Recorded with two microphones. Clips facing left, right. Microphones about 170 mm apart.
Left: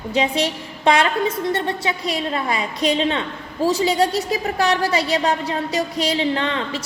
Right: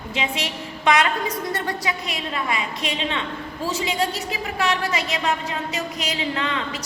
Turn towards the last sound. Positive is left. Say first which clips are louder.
# left 3 dB
turn(degrees=30)  # may be behind; listen again after turning